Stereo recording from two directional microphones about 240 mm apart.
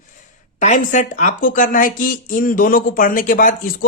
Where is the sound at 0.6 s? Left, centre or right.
Left.